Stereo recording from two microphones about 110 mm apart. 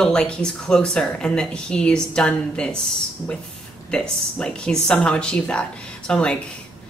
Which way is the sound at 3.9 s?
5° left (ahead or behind).